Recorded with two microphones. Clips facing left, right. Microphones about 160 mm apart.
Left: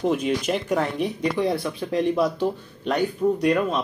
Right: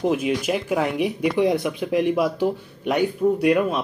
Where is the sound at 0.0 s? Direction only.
5° right (ahead or behind).